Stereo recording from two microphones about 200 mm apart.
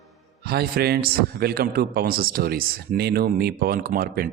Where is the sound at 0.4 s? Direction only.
50° right (ahead or behind).